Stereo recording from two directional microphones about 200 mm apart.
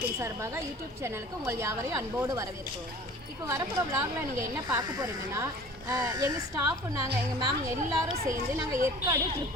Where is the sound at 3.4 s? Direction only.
15° right (ahead or behind).